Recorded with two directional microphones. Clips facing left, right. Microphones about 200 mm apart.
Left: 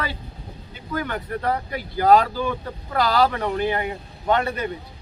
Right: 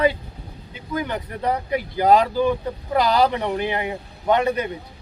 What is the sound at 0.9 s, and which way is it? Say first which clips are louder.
Speech: right 1 dB; 15° right (ahead or behind).